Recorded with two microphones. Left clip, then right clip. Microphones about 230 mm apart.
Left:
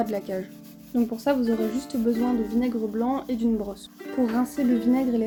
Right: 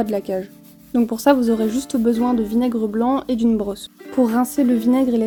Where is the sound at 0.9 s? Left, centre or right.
Right.